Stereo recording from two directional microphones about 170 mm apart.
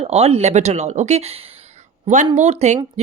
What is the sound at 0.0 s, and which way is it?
Speech, 35° right (ahead or behind).